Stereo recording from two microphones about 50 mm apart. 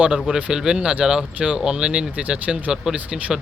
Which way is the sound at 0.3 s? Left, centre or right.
Centre.